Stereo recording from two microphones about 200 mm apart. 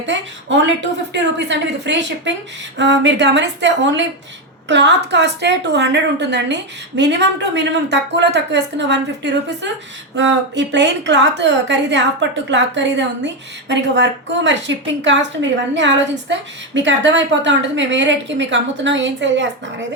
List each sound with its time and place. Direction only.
0.0 s a woman's voice: 65° right (ahead or behind)